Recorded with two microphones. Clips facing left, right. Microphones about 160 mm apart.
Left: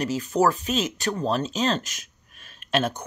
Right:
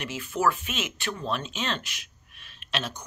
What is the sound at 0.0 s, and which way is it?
Speech, 40° left (ahead or behind).